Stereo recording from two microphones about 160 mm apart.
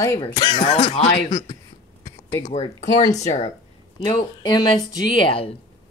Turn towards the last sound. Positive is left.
turn(degrees=35)  # may be behind; listen again after turning